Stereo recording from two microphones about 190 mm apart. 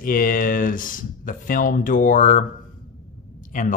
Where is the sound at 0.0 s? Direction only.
45° left (ahead or behind).